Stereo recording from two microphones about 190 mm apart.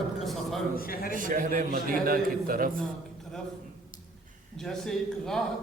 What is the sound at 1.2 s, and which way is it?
A man's voice, 45° right (ahead or behind).